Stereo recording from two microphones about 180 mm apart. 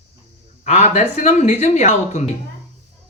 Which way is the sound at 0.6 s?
40° left (ahead or behind).